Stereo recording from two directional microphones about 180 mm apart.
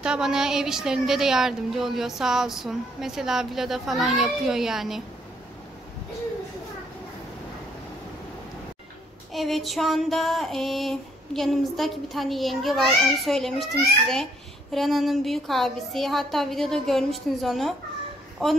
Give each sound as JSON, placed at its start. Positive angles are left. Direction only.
{"t": 0.0, "sound": "a woman's voice", "side_deg": -5}
{"t": 9.3, "sound": "a woman's voice", "side_deg": 0}